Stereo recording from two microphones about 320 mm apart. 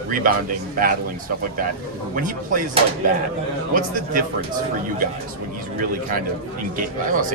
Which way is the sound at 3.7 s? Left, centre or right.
Right.